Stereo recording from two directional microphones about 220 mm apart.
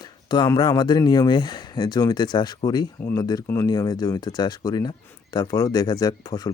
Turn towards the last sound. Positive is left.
turn(degrees=15)  # may be behind; listen again after turning